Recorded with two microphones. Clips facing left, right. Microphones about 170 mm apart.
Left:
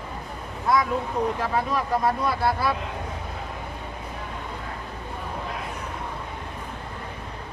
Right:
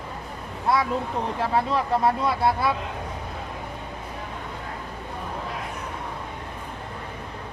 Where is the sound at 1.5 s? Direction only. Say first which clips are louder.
Right 2 dB; 25° right (ahead or behind).